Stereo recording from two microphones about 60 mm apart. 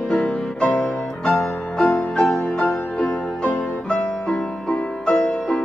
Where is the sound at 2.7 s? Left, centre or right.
Left.